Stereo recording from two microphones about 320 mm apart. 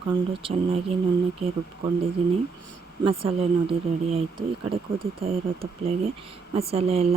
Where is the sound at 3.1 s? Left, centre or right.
Centre.